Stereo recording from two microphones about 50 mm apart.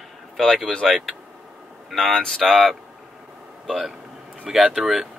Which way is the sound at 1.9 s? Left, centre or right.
Centre.